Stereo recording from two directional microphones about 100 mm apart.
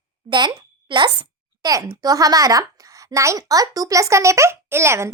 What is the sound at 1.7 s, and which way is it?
A child's voice, 35° right (ahead or behind).